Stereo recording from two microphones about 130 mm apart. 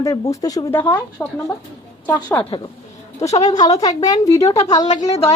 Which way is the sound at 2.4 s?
40° left (ahead or behind).